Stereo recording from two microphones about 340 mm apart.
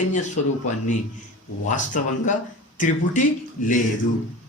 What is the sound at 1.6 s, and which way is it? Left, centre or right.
A man's voice, left.